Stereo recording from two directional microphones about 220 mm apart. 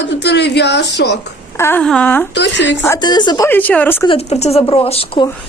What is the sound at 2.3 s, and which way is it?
Speech, 55° left (ahead or behind).